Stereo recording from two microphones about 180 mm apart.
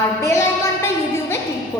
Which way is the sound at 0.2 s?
15° left (ahead or behind).